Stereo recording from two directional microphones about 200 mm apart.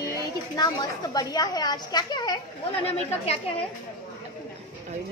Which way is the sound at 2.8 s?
30° left (ahead or behind).